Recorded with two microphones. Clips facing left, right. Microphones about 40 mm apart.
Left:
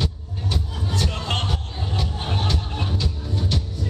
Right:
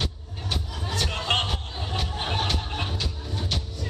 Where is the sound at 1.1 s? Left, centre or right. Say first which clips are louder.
Right 1 dB; centre.